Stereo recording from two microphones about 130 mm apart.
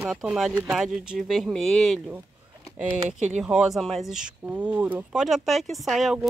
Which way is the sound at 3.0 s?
65° right (ahead or behind).